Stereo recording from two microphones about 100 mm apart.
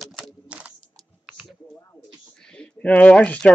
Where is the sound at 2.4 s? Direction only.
10° left (ahead or behind).